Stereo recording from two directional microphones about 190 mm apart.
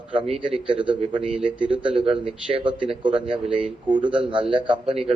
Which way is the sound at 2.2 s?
25° right (ahead or behind).